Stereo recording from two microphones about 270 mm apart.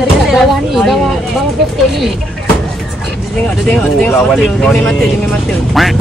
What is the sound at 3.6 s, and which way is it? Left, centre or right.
Speech, centre.